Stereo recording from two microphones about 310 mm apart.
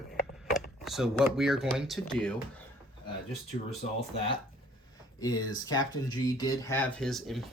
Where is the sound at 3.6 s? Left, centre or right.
Centre.